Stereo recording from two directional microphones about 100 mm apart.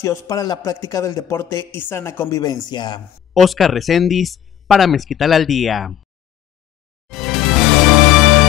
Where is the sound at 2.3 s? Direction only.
40° left (ahead or behind).